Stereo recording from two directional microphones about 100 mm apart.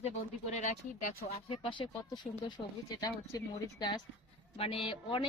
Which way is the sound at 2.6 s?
30° left (ahead or behind).